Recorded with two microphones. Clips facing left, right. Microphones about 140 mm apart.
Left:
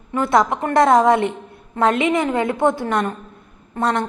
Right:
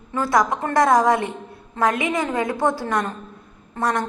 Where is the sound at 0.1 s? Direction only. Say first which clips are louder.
Left 3 dB; 25° left (ahead or behind).